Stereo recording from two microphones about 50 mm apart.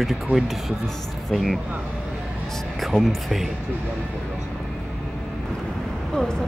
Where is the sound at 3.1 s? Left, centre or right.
Centre.